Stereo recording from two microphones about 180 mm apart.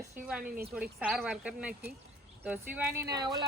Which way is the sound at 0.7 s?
5° right (ahead or behind).